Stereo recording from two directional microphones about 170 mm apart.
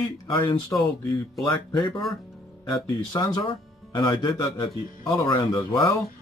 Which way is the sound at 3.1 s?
25° left (ahead or behind).